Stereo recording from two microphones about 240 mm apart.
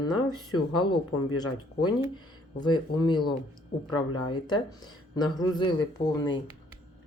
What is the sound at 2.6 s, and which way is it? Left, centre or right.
Speech, centre.